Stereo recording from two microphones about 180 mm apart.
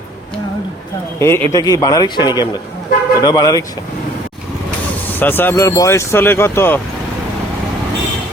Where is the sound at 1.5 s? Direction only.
20° left (ahead or behind).